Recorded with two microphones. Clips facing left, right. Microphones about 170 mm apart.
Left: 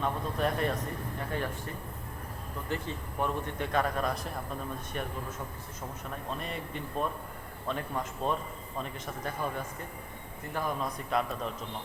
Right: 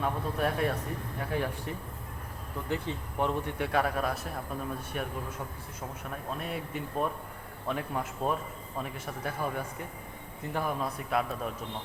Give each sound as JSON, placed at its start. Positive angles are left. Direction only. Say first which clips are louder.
{"t": 0.0, "sound": "speech", "louder": "even", "side_deg": -5}
{"t": 3.6, "sound": "speech", "louder": "even", "side_deg": -5}